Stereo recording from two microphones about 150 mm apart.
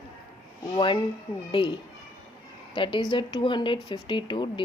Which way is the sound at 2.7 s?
35° left (ahead or behind).